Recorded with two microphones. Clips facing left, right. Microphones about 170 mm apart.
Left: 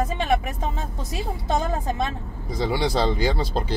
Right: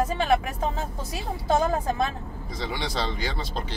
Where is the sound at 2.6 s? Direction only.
35° left (ahead or behind).